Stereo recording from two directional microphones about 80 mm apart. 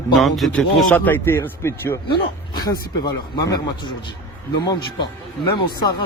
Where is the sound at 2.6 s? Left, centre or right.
Left.